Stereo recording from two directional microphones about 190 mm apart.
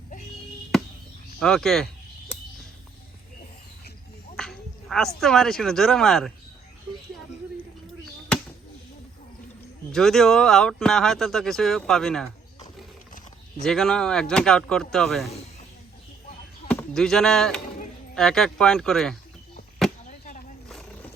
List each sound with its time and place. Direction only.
1.4 s speech: centre (ahead or behind)
4.4 s a woman's voice: 5° left (ahead or behind)
9.9 s speech: centre (ahead or behind)
13.7 s speech: centre (ahead or behind)
16.6 s speech: 5° left (ahead or behind)
20.1 s chop: 40° left (ahead or behind)